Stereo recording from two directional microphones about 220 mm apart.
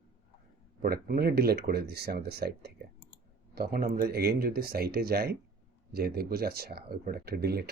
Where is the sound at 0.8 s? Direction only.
45° right (ahead or behind).